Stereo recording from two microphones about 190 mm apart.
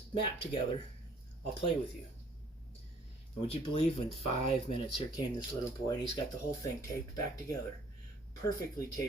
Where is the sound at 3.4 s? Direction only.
30° left (ahead or behind).